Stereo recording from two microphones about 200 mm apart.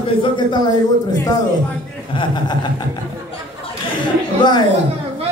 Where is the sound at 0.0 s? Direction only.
25° left (ahead or behind).